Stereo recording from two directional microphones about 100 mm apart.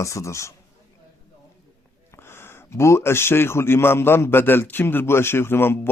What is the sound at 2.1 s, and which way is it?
A man's voice, 25° left (ahead or behind).